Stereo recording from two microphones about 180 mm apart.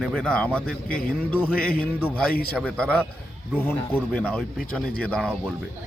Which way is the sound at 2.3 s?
55° left (ahead or behind).